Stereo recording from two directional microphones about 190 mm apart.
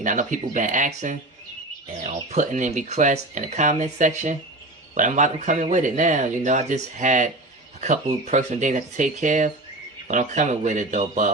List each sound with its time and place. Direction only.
0.0 s speech: 40° right (ahead or behind)